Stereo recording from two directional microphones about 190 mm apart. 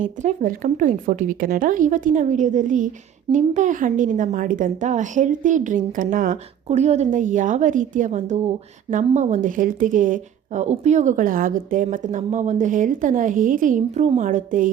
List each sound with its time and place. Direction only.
0.0 s speech: 40° right (ahead or behind)